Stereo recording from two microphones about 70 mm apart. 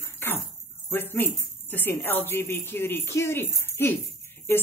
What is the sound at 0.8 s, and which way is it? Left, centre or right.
A woman's voice, left.